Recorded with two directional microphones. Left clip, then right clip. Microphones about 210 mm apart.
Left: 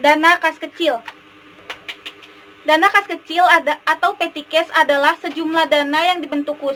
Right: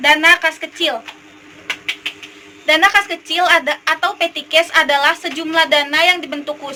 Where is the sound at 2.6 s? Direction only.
35° left (ahead or behind).